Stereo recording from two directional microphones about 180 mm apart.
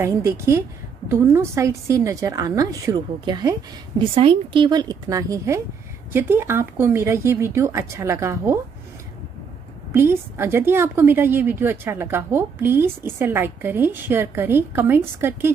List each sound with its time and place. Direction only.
0.0 s a woman's voice: 15° right (ahead or behind)
4.0 s a woman's voice: 30° right (ahead or behind); by 8.5 s 15° right (ahead or behind)
9.9 s a woman's voice: 15° right (ahead or behind)